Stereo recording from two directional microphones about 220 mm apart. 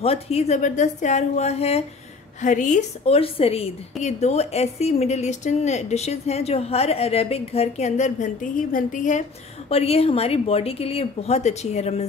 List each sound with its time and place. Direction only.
0.0 s a woman's voice: 30° left (ahead or behind)